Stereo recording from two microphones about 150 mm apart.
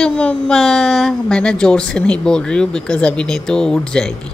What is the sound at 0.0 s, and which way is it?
A woman's voice, 5° left (ahead or behind).